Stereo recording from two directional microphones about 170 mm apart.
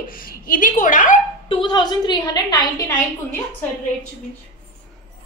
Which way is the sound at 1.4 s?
30° left (ahead or behind).